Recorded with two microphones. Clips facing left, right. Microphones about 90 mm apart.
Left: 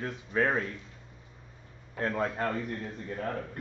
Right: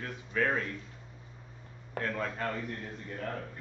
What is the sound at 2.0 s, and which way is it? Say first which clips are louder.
Speech: left 4 dB; 25° left (ahead or behind).